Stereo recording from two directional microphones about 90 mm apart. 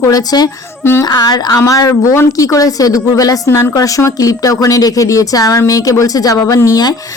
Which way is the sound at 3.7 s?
40° left (ahead or behind).